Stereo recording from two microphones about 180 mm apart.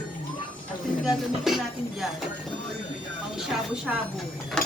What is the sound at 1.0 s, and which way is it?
Music, centre (ahead or behind).